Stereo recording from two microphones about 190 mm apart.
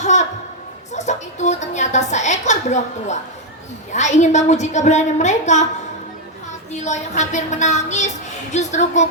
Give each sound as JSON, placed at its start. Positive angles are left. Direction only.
{"t": 0.0, "sound": "a sound", "side_deg": 40}
{"t": 0.9, "sound": "a woman's voice", "side_deg": 40}
{"t": 6.7, "sound": "a woman's voice", "side_deg": 40}